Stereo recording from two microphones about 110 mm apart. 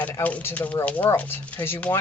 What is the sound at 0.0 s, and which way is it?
Speech, 15° left (ahead or behind).